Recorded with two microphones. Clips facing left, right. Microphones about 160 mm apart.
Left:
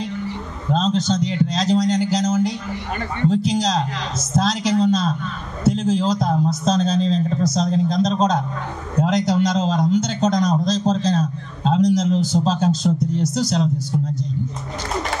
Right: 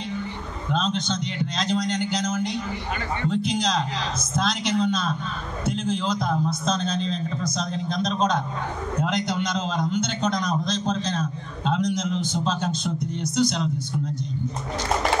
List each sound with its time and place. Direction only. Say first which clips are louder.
0.7 s a man's voice: left 6 dB; 40° left (ahead or behind)